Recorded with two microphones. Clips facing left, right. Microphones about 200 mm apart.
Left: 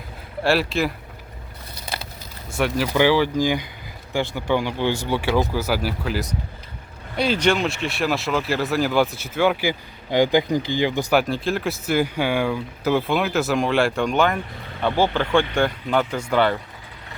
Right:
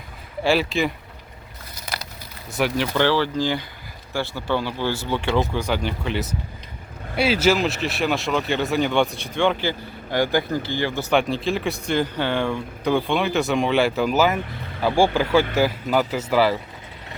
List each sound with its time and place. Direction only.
0.4 s speech: centre (ahead or behind)
2.6 s speech: centre (ahead or behind); by 11.1 s 15° left (ahead or behind)
11.1 s speech: centre (ahead or behind)